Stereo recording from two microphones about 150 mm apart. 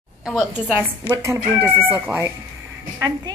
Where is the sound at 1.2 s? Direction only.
20° right (ahead or behind).